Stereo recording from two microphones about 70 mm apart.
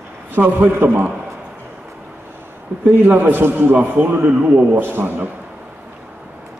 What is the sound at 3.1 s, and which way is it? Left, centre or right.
A man's voice, right.